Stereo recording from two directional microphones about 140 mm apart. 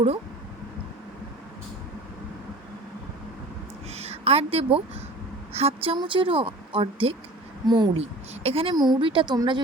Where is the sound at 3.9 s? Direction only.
50° right (ahead or behind); by 8.0 s 30° right (ahead or behind).